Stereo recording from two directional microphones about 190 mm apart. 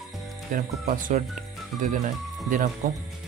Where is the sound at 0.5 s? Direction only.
45° right (ahead or behind).